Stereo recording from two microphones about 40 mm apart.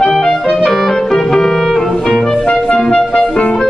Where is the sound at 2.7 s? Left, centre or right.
Centre.